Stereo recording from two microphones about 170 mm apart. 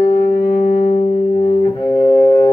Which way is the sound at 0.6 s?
45° left (ahead or behind).